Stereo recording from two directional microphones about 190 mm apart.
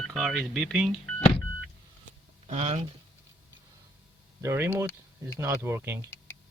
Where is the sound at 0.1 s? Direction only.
Centre (ahead or behind).